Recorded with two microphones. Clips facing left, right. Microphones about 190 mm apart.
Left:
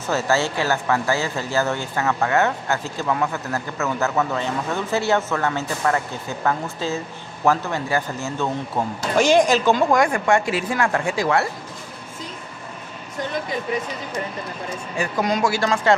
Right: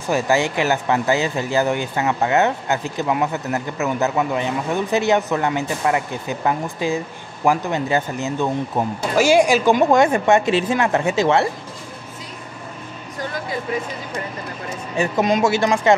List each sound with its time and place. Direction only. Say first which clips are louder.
0.0 s a woman's voice: right 2 dB; 15° right (ahead or behind)
15.0 s a woman's voice: right 4 dB; 20° right (ahead or behind)